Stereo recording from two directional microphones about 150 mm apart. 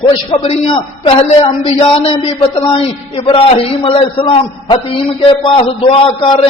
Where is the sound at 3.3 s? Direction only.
35° left (ahead or behind).